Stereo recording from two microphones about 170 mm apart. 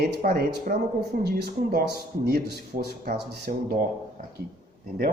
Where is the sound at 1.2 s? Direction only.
70° right (ahead or behind).